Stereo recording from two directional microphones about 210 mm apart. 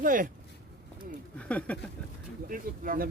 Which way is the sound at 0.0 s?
40° right (ahead or behind).